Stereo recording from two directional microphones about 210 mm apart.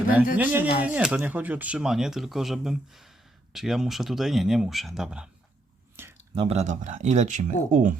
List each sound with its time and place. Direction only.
0.3 s speech: 10° right (ahead or behind)
6.0 s a sound: 10° right (ahead or behind)
6.3 s speech: 30° right (ahead or behind)